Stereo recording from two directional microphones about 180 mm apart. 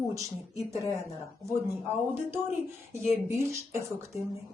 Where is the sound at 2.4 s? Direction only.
15° right (ahead or behind).